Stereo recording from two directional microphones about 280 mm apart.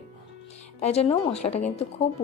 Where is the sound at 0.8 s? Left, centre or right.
Left.